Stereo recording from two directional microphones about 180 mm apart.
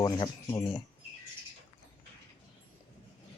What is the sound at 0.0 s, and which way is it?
Speech, 25° left (ahead or behind).